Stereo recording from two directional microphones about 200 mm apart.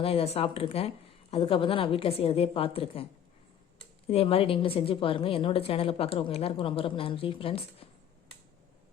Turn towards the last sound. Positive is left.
turn(degrees=30)  # may be behind; listen again after turning